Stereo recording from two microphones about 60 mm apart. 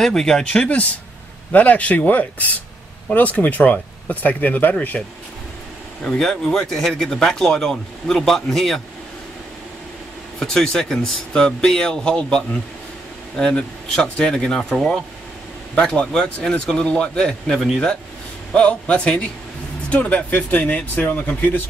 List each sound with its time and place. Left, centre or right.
0.0 s speech: centre
1.5 s speech: left
6.0 s a man's voice: centre
10.4 s speech: centre
15.7 s speech: centre
18.5 s speech: left